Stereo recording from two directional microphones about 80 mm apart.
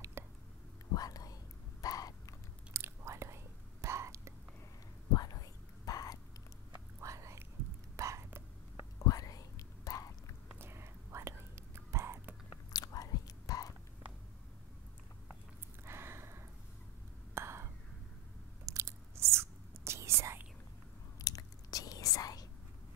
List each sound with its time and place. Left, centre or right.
0.2 s whispering: right
0.9 s whispering: left
2.7 s chewing: right
3.8 s whispering: right
5.1 s whispering: left
6.7 s whispering: right
7.9 s a sound: right
9.0 s whispering: left
10.6 s whispering: right
12.7 s whispering: left
15.8 s a sound: right
18.7 s whispering: right
21.2 s whispering: left